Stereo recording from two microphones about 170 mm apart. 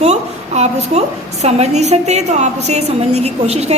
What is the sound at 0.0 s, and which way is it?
A woman's voice, 40° right (ahead or behind).